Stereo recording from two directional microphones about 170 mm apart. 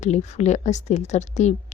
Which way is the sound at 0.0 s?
40° left (ahead or behind).